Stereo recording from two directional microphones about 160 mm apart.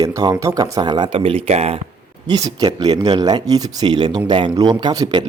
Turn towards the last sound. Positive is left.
turn(degrees=-25)  # may be behind; listen again after turning